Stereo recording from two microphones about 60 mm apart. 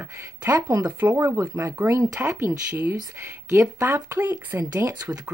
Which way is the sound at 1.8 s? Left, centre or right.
Right.